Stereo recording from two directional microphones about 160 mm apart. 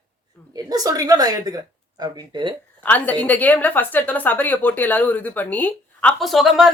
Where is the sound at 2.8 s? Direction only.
10° left (ahead or behind).